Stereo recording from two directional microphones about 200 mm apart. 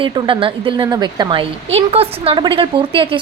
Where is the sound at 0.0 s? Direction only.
25° right (ahead or behind).